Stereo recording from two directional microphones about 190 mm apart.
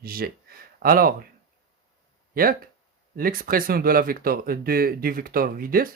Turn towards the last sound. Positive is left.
turn(degrees=-50)  # may be behind; listen again after turning